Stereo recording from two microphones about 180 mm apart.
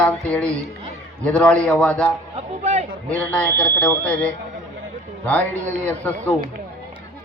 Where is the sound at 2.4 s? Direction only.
35° right (ahead or behind).